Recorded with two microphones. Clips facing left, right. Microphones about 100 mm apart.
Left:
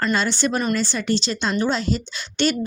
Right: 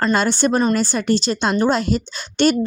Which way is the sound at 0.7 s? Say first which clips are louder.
Right 4 dB; 45° right (ahead or behind).